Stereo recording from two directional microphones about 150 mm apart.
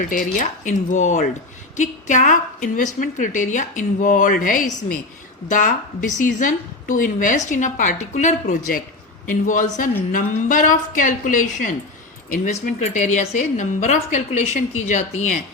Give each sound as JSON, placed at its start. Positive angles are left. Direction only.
{"t": 0.0, "sound": "a woman's voice", "side_deg": 60}